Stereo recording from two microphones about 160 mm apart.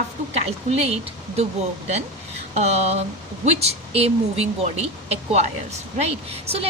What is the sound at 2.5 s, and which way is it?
A woman's voice, 40° right (ahead or behind).